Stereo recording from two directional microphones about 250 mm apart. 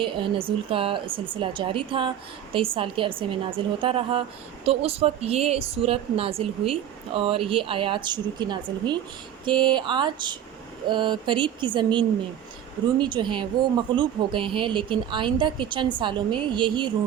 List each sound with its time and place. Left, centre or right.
0.0 s speech: right